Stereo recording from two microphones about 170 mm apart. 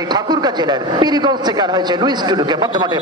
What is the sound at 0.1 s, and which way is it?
A man's voice, 25° right (ahead or behind).